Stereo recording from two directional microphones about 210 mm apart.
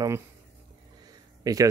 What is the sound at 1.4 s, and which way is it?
Speech, 15° right (ahead or behind).